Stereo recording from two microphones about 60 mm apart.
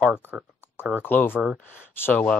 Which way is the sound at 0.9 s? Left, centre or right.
Left.